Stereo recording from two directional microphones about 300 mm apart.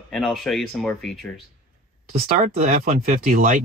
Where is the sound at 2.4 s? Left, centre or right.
Right.